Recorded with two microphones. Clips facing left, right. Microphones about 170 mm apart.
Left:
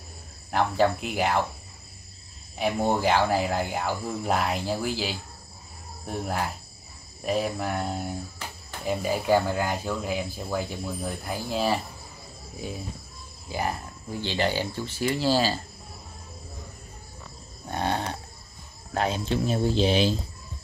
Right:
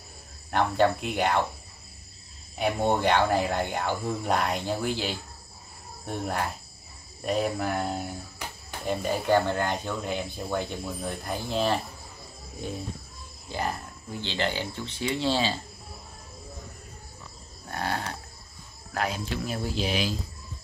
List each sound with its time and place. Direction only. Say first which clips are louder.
0.5 s speech: even; centre (ahead or behind)
2.6 s speech: even; 5° left (ahead or behind)
13.5 s speech: left 2 dB; 10° left (ahead or behind)
17.6 s frog: left 3 dB; 20° left (ahead or behind)
18.9 s speech: left 4 dB; 25° left (ahead or behind)